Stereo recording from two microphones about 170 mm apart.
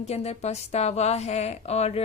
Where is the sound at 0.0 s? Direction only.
40° left (ahead or behind).